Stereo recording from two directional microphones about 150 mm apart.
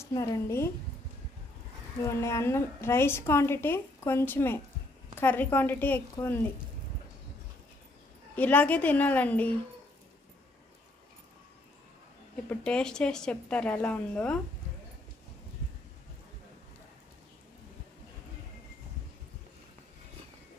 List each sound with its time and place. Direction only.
0.0 s a woman's voice: 20° left (ahead or behind)
2.0 s a woman's voice: 20° left (ahead or behind)
8.4 s a woman's voice: 10° left (ahead or behind)
12.4 s a woman's voice: 5° left (ahead or behind)